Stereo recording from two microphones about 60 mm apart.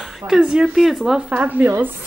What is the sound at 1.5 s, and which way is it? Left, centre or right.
Speech, right.